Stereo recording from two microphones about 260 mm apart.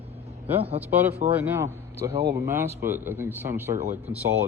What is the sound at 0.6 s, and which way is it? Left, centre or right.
Speech, right.